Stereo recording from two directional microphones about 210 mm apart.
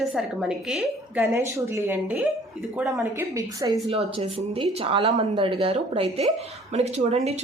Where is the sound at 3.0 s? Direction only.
15° right (ahead or behind).